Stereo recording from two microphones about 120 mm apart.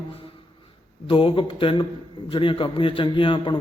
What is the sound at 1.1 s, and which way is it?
A man's voice, 45° left (ahead or behind).